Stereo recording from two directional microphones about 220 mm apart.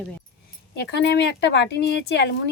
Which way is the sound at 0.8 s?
50° left (ahead or behind).